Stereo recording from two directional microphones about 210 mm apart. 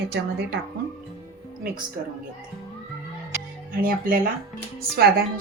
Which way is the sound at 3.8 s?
40° right (ahead or behind).